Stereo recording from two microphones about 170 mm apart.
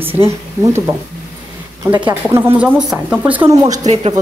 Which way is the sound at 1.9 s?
25° right (ahead or behind).